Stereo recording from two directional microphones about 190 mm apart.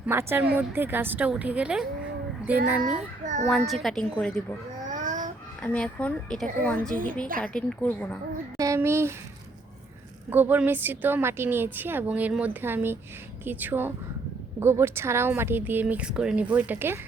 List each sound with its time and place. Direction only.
0.0 s speech: 10° right (ahead or behind)
2.8 s a child's voice: 40° right (ahead or behind)
3.8 s a woman's voice: 5° left (ahead or behind)
4.9 s a sound: 40° right (ahead or behind)
5.6 s speech: 5° left (ahead or behind)
8.5 s speech: 15° right (ahead or behind)
10.2 s speech: 10° right (ahead or behind)